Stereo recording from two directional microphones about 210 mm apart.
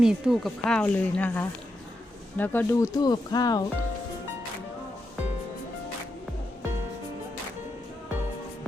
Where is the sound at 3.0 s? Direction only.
20° left (ahead or behind).